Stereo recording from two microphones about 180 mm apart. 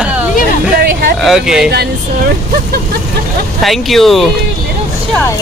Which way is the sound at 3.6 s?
Centre (ahead or behind).